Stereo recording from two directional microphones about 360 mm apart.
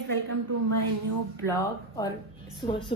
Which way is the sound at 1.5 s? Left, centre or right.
Centre.